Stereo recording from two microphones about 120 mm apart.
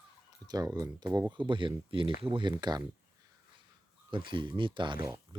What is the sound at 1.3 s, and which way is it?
Speech, 45° right (ahead or behind).